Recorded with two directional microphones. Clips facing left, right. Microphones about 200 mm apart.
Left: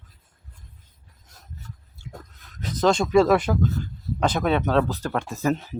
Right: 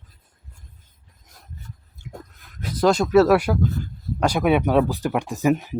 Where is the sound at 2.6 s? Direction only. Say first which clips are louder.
Right 2 dB; 5° right (ahead or behind).